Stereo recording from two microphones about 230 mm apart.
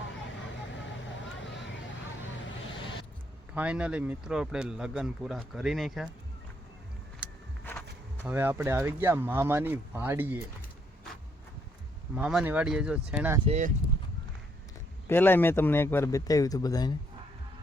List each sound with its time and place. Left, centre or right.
3.5 s speech: centre
7.6 s walk: centre
8.3 s speech: centre
12.1 s speech: centre
13.4 s speech: right
15.1 s speech: centre